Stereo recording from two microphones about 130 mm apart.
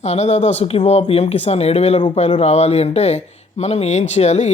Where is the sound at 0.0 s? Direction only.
60° left (ahead or behind).